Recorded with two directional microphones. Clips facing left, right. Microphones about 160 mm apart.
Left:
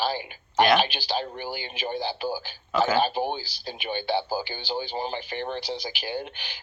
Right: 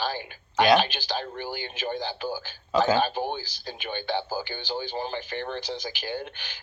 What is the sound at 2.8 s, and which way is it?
Speech, 15° right (ahead or behind).